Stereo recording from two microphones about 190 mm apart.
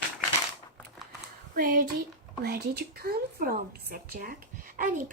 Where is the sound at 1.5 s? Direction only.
45° right (ahead or behind).